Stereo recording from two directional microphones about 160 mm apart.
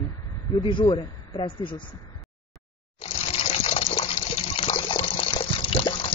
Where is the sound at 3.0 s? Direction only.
35° left (ahead or behind).